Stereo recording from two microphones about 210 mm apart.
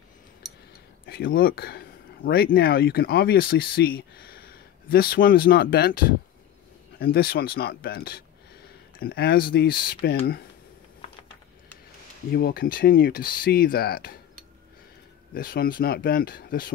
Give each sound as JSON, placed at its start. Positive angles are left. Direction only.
{"t": 1.0, "sound": "speech", "side_deg": 45}
{"t": 12.3, "sound": "speech", "side_deg": 45}
{"t": 15.3, "sound": "speech", "side_deg": 45}